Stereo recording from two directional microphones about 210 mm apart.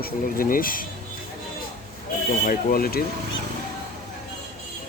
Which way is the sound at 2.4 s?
40° left (ahead or behind).